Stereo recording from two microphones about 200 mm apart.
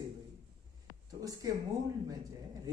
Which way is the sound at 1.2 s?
20° right (ahead or behind).